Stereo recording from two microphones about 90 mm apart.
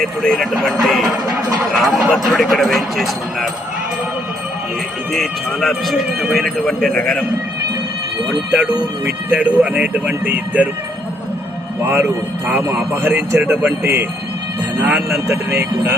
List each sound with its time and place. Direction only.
0.0 s a man's voice: 5° left (ahead or behind)
5.1 s a man's voice: centre (ahead or behind)
8.4 s speech: 15° right (ahead or behind)
11.8 s a man's voice: 25° right (ahead or behind)
14.8 s speech: 15° right (ahead or behind)
15.1 s a man's voice: 30° right (ahead or behind)